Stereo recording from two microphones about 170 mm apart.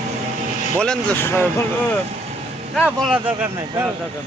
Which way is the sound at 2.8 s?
5° right (ahead or behind).